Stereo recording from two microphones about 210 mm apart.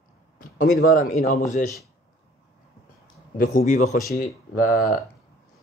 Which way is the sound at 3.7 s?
35° left (ahead or behind).